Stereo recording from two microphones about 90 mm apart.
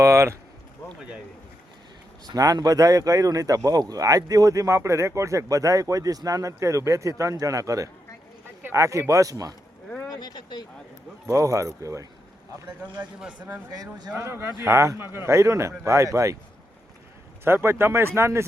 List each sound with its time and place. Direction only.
0.0 s speech: 35° right (ahead or behind)
2.2 s speech: 45° right (ahead or behind)
10.1 s speech: 50° left (ahead or behind)
11.3 s speech: 35° right (ahead or behind)
13.1 s speech: 10° right (ahead or behind)
13.7 s speech: 45° right (ahead or behind)
14.2 s speech: 30° right (ahead or behind)
17.4 s speech: 25° right (ahead or behind)